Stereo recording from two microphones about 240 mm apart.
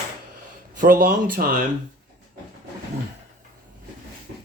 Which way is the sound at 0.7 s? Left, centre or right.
Right.